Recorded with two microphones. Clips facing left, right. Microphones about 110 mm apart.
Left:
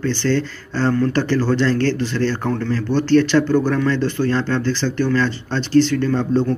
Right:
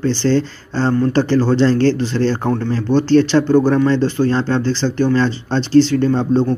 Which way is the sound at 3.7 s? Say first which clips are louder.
Right 4 dB; 30° right (ahead or behind).